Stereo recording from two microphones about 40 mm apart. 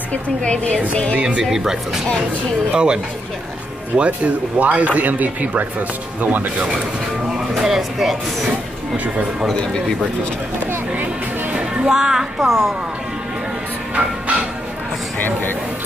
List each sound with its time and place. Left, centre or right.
0.1 s a woman's voice: left
1.6 s speech: centre; by 6.5 s right
7.2 s speech: centre
11.5 s music: right
11.9 s speech: centre
12.4 s speech: centre